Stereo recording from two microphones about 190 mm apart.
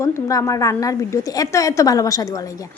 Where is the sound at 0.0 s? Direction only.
15° left (ahead or behind).